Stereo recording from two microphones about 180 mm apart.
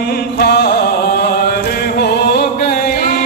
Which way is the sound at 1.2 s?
60° left (ahead or behind).